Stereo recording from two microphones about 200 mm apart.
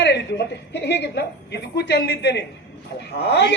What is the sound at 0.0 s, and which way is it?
Speech, 55° left (ahead or behind).